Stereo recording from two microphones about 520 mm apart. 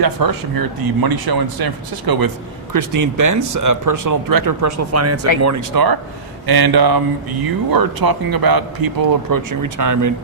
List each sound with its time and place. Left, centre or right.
0.0 s speech: right